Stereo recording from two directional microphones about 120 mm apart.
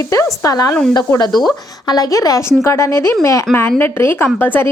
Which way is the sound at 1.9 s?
30° left (ahead or behind).